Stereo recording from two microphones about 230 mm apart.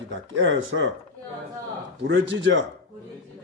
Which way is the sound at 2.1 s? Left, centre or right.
Right.